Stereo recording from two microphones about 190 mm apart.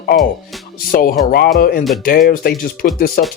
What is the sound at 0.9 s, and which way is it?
Speech, 50° left (ahead or behind).